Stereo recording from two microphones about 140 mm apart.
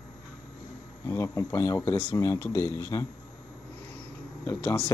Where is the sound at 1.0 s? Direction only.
20° left (ahead or behind).